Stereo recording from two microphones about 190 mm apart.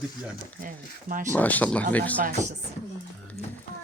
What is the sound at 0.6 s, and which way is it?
Speech, 45° right (ahead or behind).